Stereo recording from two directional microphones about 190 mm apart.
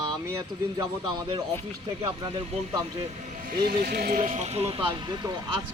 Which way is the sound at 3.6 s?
55° right (ahead or behind).